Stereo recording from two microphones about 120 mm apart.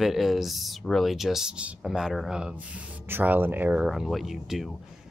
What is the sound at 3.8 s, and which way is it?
Speech, centre (ahead or behind).